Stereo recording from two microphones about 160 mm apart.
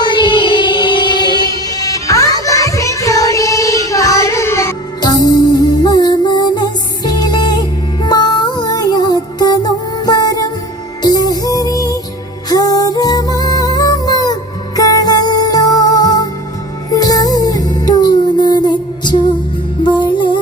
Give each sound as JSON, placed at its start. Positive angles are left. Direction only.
{"t": 0.0, "sound": "music", "side_deg": 30}